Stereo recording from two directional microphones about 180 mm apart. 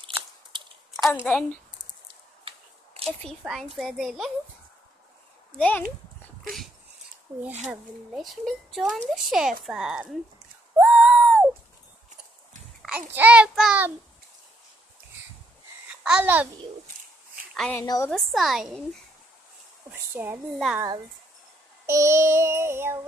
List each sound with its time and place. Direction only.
1.0 s speech: 5° left (ahead or behind)
2.4 s a sound: 35° right (ahead or behind)
3.3 s speech: centre (ahead or behind)
5.6 s a child's voice: 10° left (ahead or behind)
8.1 s speech: centre (ahead or behind)
10.8 s a sound: 5° right (ahead or behind)
12.8 s child singing: 10° right (ahead or behind)
15.9 s babbling: 5° right (ahead or behind)
17.6 s a woman's voice: 5° left (ahead or behind)
17.8 s a woman's voice: 20° left (ahead or behind)
18.1 s speech: centre (ahead or behind)
20.2 s child singing: 10° right (ahead or behind)
20.5 s speech: centre (ahead or behind)
21.8 s child singing: 15° right (ahead or behind)